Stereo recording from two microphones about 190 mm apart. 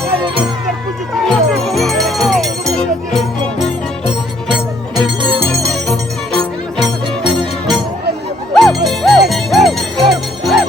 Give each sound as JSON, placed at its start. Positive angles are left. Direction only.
{"t": 1.2, "sound": "music", "side_deg": 0}
{"t": 5.2, "sound": "music", "side_deg": -25}
{"t": 5.5, "sound": "music", "side_deg": 5}
{"t": 8.5, "sound": "music", "side_deg": 0}